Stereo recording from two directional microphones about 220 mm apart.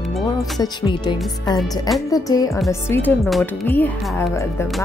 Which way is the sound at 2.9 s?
5° left (ahead or behind).